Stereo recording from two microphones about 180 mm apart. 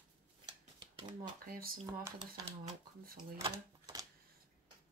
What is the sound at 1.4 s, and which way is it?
Speech, 55° right (ahead or behind).